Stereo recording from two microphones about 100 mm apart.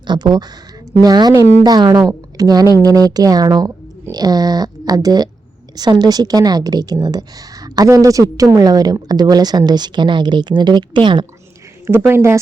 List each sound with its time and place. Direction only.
0.1 s a woman's voice: 45° right (ahead or behind)
11.9 s speech: 25° right (ahead or behind)